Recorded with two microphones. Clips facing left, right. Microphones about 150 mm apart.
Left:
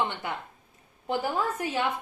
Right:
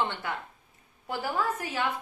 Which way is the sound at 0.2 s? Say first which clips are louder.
Even; 20° left (ahead or behind).